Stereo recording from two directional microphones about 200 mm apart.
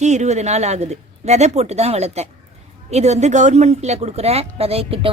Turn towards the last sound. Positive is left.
turn(degrees=-30)  # may be behind; listen again after turning